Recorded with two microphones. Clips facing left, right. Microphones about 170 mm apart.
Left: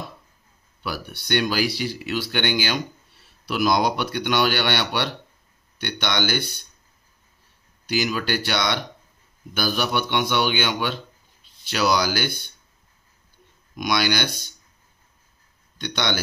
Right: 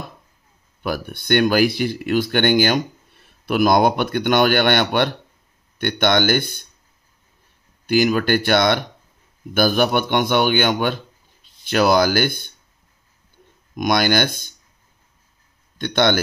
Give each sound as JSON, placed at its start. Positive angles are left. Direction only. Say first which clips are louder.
{"t": 0.8, "sound": "speech", "louder": "right 7 dB", "side_deg": -50}
{"t": 7.8, "sound": "speech", "louder": "right 8 dB", "side_deg": -50}
{"t": 13.7, "sound": "speech", "louder": "right 5 dB", "side_deg": -50}
{"t": 15.8, "sound": "speech", "louder": "right 8 dB", "side_deg": -50}